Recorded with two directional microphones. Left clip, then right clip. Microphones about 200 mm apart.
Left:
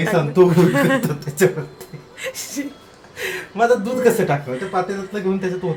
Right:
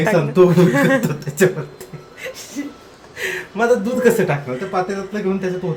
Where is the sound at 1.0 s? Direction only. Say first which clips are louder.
Right 2 dB; centre (ahead or behind).